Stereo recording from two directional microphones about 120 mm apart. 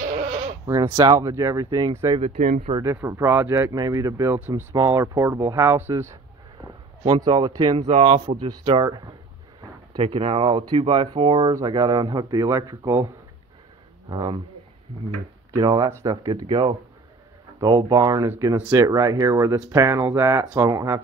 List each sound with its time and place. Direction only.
0.7 s speech: 30° right (ahead or behind)
2.3 s speech: 90° right
2.8 s speech: 25° right (ahead or behind)
3.7 s speech: 30° right (ahead or behind)
7.1 s speech: 35° right (ahead or behind)
7.8 s speech: 65° right (ahead or behind)
8.4 s speech: 40° right (ahead or behind)
9.9 s speech: 45° right (ahead or behind)
11.5 s speech: 35° right (ahead or behind)
15.5 s speech: 35° right (ahead or behind)
17.6 s speech: 35° right (ahead or behind)